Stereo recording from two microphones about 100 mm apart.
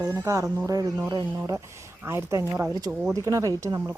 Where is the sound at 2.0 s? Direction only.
25° right (ahead or behind).